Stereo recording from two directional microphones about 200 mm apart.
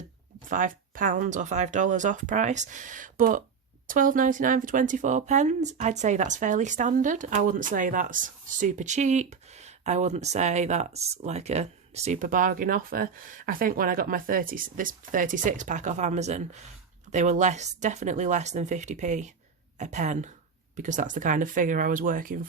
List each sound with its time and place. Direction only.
0.4 s speech: 40° right (ahead or behind)